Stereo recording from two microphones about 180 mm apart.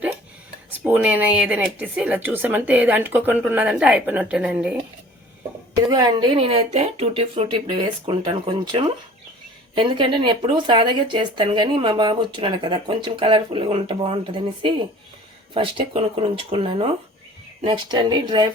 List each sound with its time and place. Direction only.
0.9 s speech: 10° right (ahead or behind)
5.8 s speech: 20° right (ahead or behind)